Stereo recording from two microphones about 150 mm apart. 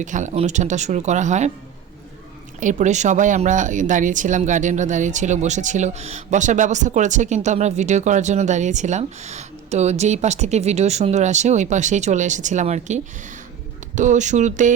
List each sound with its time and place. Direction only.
0.0 s speech: 55° right (ahead or behind)
2.6 s speech: 55° right (ahead or behind)